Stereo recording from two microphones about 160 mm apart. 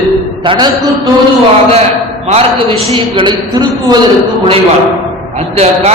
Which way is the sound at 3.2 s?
30° right (ahead or behind).